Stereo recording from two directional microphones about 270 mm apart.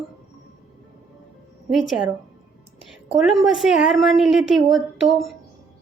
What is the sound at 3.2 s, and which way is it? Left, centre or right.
A woman's voice, centre.